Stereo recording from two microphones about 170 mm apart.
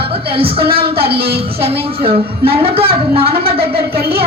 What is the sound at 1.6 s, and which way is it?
A woman's voice, 35° right (ahead or behind).